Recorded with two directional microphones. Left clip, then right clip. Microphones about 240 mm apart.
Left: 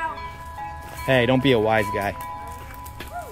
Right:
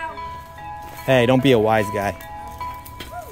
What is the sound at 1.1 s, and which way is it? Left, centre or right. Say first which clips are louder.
Speech: right 3 dB; right.